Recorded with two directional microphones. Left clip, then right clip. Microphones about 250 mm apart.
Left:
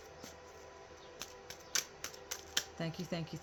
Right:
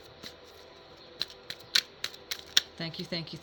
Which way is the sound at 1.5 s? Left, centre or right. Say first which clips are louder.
Right 10 dB; right.